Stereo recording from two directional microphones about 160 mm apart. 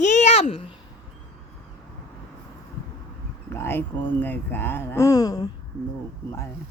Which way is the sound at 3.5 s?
15° left (ahead or behind).